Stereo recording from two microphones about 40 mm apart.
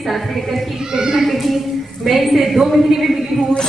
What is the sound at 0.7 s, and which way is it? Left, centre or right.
Speech, centre.